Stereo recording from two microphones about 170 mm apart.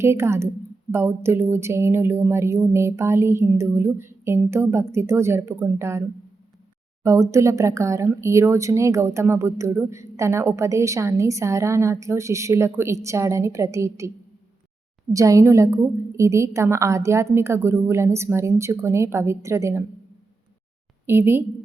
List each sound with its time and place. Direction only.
0.0 s speech: 15° right (ahead or behind)
7.0 s speech: 15° right (ahead or behind)
15.1 s speech: 20° right (ahead or behind)
21.1 s speech: 15° right (ahead or behind)